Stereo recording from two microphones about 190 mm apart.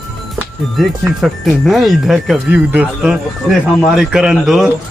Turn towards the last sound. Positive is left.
turn(degrees=0)  # may be behind; listen again after turning